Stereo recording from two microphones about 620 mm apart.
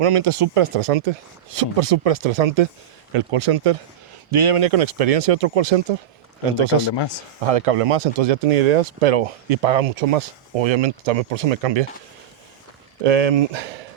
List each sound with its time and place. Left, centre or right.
0.0 s speech: right
3.1 s speech: right
6.6 s speech: right
13.0 s speech: right